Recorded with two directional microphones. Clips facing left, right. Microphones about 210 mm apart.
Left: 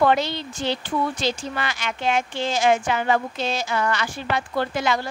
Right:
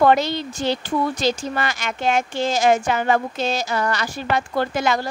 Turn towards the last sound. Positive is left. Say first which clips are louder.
# right 2 dB
turn(degrees=-45)  # may be behind; listen again after turning